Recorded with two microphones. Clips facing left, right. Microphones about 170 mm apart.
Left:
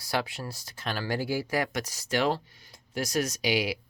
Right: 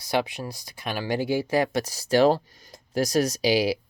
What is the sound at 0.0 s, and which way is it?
Speech, 20° right (ahead or behind).